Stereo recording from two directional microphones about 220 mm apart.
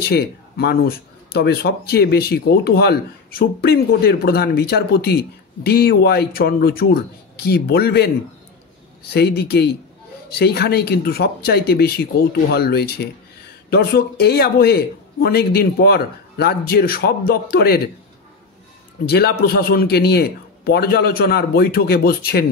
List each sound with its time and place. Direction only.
0.0 s speech: 45° left (ahead or behind)
9.1 s speech: 45° left (ahead or behind)
19.0 s speech: 45° left (ahead or behind)